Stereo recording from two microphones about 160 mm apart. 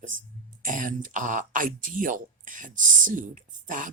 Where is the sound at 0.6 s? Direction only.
55° right (ahead or behind).